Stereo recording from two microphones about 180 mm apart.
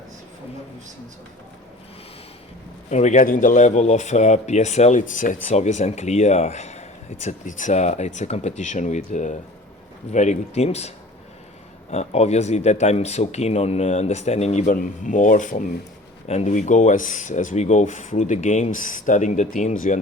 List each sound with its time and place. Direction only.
2.9 s speech: 40° left (ahead or behind)